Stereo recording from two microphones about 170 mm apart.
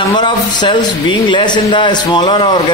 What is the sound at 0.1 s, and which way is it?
A man's voice, 25° left (ahead or behind).